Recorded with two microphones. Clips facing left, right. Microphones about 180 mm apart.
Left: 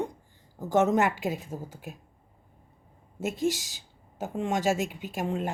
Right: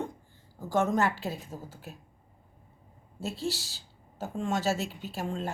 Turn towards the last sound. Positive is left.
turn(degrees=15)  # may be behind; listen again after turning